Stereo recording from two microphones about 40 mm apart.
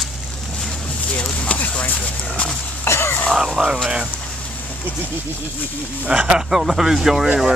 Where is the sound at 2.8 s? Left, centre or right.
Left.